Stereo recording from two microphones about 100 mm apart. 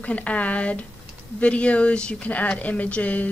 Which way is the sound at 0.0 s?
15° left (ahead or behind).